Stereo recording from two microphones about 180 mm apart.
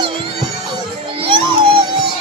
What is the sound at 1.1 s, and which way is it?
Music, 30° right (ahead or behind).